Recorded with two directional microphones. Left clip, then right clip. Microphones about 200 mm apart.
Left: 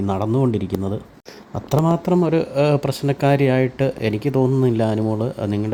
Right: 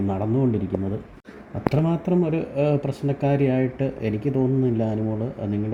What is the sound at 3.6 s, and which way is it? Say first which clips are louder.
Speech: left 5 dB; 15° left (ahead or behind).